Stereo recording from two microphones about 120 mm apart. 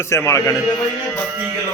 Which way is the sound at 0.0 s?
20° left (ahead or behind).